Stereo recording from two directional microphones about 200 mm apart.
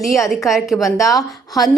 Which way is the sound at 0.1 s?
Centre (ahead or behind).